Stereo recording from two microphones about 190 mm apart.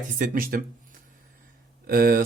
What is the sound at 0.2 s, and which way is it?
Speech, 50° right (ahead or behind).